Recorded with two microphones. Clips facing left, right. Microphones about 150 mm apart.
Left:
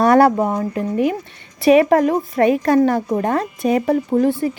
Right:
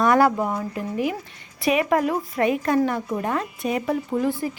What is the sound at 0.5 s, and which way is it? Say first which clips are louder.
Speech: left 6 dB; 50° left (ahead or behind).